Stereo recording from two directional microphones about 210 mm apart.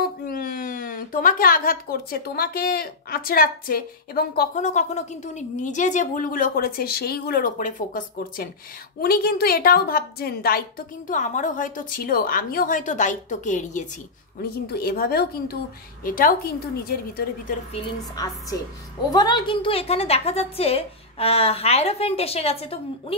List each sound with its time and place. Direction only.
0.0 s speech: 45° left (ahead or behind)
11.1 s a woman's voice: 35° left (ahead or behind)
14.7 s a woman's voice: 45° left (ahead or behind)
17.8 s a woman's voice: 15° left (ahead or behind)